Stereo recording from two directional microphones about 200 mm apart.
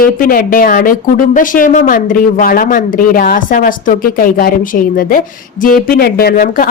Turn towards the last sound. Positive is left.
turn(degrees=45)  # may be behind; listen again after turning